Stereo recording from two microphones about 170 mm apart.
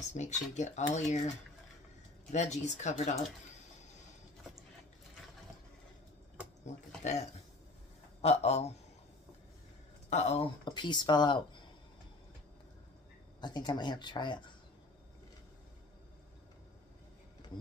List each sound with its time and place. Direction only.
0.1 s speech: 45° left (ahead or behind)
2.3 s speech: 45° left (ahead or behind)
7.0 s a man's voice: 45° left (ahead or behind)
10.0 s speech: 40° left (ahead or behind)
13.4 s speech: 25° left (ahead or behind)